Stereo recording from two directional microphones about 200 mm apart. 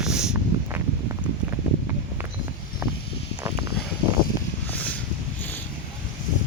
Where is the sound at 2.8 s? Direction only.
15° right (ahead or behind).